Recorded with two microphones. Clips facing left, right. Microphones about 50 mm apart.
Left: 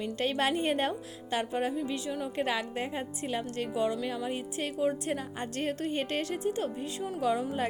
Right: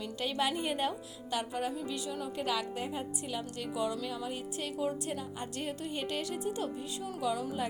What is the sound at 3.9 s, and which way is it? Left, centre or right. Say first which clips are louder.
A woman's voice: left 4 dB; left.